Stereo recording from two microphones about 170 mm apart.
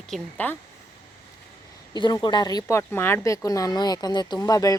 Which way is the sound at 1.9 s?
25° left (ahead or behind).